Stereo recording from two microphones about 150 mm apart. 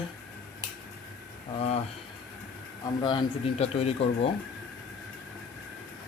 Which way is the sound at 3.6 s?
45° left (ahead or behind).